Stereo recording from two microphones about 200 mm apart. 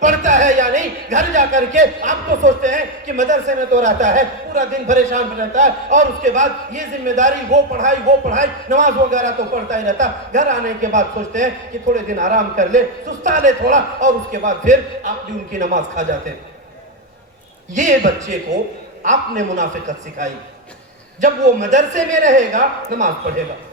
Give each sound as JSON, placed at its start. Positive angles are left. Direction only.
{"t": 0.0, "sound": "a man's voice", "side_deg": -40}
{"t": 17.7, "sound": "a man's voice", "side_deg": -40}
{"t": 21.2, "sound": "a man's voice", "side_deg": -40}